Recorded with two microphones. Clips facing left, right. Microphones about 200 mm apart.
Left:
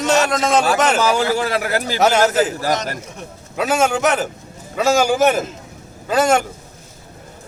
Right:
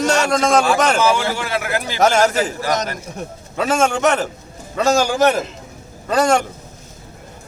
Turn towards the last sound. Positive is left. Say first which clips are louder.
# even
turn(degrees=5)  # may be behind; listen again after turning